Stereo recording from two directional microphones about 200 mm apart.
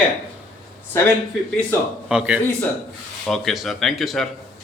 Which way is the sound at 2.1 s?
5° right (ahead or behind).